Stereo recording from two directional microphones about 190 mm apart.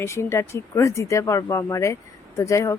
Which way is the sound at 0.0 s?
15° left (ahead or behind).